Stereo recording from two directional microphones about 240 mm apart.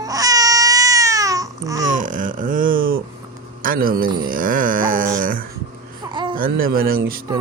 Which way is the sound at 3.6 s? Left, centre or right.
Right.